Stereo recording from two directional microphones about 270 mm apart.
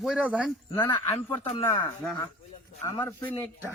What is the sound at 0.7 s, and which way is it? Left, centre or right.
Speech, centre.